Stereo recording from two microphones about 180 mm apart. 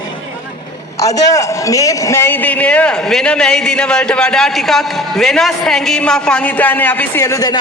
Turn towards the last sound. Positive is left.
turn(degrees=10)  # may be behind; listen again after turning